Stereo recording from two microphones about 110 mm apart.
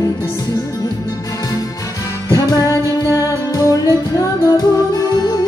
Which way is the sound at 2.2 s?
30° left (ahead or behind).